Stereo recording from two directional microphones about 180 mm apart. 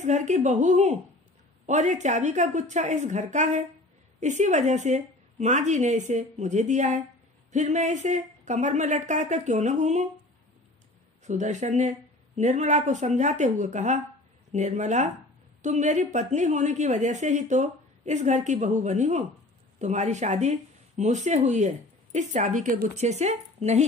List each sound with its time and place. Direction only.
0.0 s speech: 40° right (ahead or behind)
11.2 s speech: 40° right (ahead or behind)